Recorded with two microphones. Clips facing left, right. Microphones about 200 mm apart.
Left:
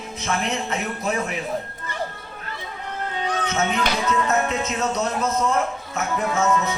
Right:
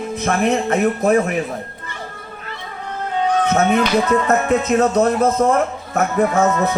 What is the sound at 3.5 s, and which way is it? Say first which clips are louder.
Music: right 6 dB; 55° right (ahead or behind).